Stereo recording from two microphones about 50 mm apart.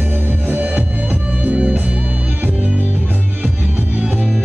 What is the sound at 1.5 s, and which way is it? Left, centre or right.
Music, right.